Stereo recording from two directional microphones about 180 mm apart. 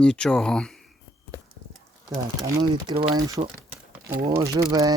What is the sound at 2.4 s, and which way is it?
Speech, 20° right (ahead or behind).